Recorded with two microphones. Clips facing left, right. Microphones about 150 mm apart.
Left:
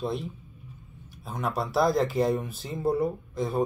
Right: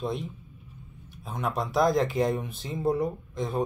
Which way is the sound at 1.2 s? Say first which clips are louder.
Even; 5° left (ahead or behind).